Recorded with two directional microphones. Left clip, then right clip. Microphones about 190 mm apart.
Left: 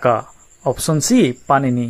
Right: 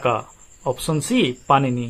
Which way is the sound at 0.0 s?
40° left (ahead or behind).